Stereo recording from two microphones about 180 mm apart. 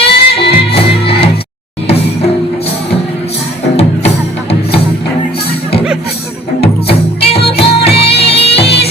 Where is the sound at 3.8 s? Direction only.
35° left (ahead or behind).